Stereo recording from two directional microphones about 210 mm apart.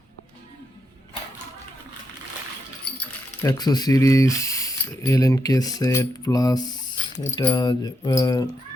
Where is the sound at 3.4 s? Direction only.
15° left (ahead or behind).